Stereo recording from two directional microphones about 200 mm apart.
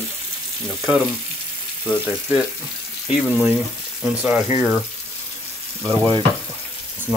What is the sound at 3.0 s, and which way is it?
Speech, 5° right (ahead or behind).